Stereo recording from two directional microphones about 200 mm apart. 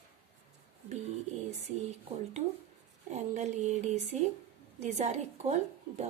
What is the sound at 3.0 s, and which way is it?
A woman's voice, 35° right (ahead or behind).